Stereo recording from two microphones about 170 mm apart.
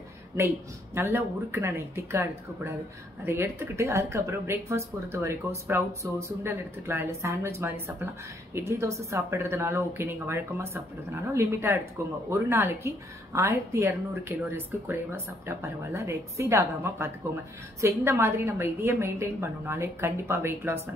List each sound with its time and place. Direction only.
0.9 s a woman's voice: 15° right (ahead or behind)